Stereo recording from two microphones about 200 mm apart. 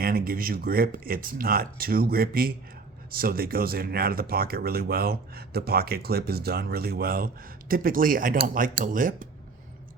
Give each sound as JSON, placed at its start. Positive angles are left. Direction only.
{"t": 0.0, "sound": "speech", "side_deg": -45}